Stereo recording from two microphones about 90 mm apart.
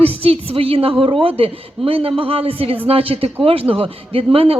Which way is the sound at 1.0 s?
75° right (ahead or behind).